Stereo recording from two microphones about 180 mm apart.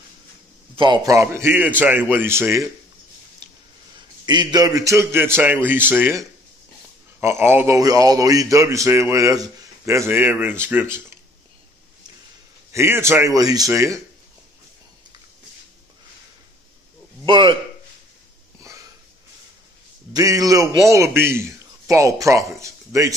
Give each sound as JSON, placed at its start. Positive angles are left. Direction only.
{"t": 0.7, "sound": "speech", "side_deg": -25}
{"t": 4.3, "sound": "speech", "side_deg": -25}
{"t": 12.7, "sound": "speech", "side_deg": -15}
{"t": 17.3, "sound": "a man's voice", "side_deg": -25}
{"t": 20.1, "sound": "speech", "side_deg": -20}